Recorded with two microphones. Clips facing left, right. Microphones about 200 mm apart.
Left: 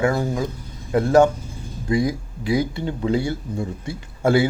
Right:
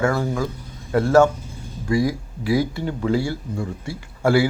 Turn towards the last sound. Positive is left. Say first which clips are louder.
# even
turn(degrees=20)  # may be behind; listen again after turning